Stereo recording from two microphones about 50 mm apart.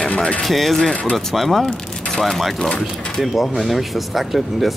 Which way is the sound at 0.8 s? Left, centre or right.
Left.